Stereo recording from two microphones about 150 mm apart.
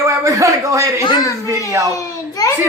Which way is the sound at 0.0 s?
20° right (ahead or behind).